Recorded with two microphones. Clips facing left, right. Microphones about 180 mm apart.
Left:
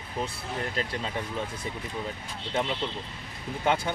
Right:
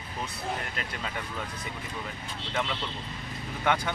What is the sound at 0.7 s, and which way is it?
Speech, 30° left (ahead or behind).